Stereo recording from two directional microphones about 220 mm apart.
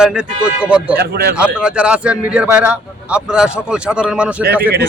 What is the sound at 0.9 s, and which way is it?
Speech, 45° right (ahead or behind).